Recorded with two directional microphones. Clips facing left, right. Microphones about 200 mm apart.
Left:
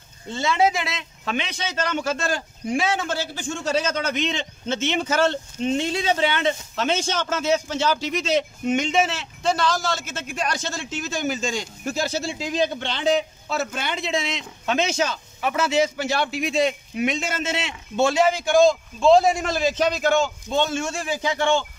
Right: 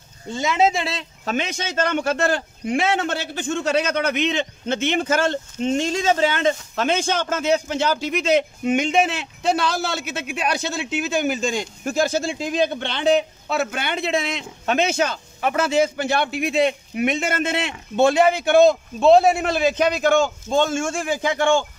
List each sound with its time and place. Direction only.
0.3 s speech: 15° right (ahead or behind); by 21.6 s 50° right (ahead or behind)